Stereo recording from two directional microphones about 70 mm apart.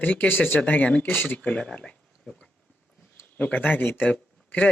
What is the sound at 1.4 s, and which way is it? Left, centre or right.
Speech, centre.